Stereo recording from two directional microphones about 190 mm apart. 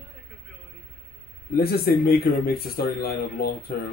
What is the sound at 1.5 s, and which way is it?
Speech, 55° left (ahead or behind).